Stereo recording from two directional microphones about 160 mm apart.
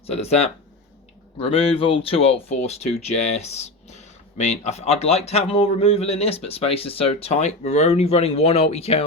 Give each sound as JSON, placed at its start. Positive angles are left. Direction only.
{"t": 0.1, "sound": "speech", "side_deg": 40}